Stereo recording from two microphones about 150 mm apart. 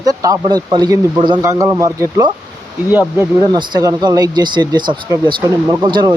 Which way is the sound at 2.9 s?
10° right (ahead or behind).